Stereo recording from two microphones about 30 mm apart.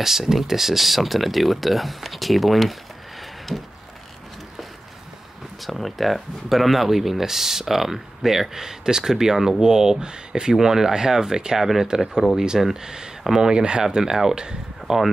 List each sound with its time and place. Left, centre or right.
0.0 s speech: centre
5.6 s speech: centre; by 11.5 s right
11.5 s speech: centre
11.9 s speech: right
14.3 s speech: right
14.9 s speech: centre